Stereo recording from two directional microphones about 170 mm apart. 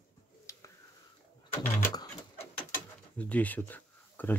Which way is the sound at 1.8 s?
25° left (ahead or behind).